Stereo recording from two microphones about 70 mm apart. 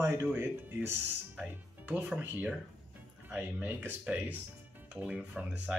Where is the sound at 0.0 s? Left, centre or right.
Right.